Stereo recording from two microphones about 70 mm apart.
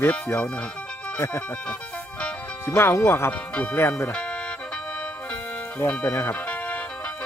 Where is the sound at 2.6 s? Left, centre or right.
Left.